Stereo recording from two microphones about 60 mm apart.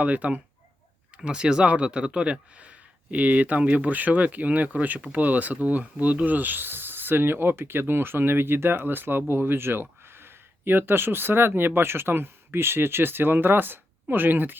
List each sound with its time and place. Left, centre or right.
0.0 s speech: right